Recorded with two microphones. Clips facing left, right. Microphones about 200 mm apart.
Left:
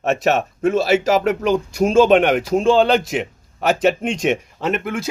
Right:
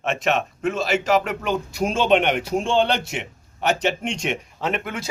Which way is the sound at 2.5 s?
90° left.